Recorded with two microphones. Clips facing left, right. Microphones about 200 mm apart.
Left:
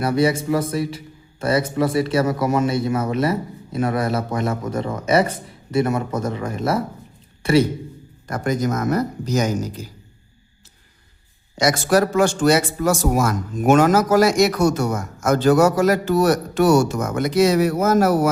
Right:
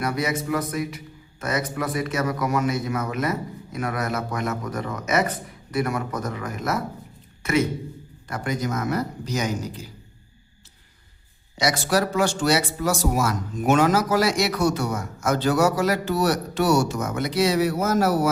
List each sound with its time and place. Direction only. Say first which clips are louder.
0.0 s a man's voice: left 7 dB; 30° left (ahead or behind)
8.3 s a man's voice: left 5 dB; 45° left (ahead or behind)
11.5 s a man's voice: left 5 dB; 50° left (ahead or behind)